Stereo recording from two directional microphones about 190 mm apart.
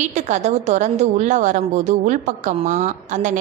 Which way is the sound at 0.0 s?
40° right (ahead or behind).